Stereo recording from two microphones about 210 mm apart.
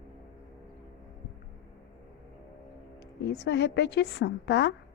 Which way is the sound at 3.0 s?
55° left (ahead or behind).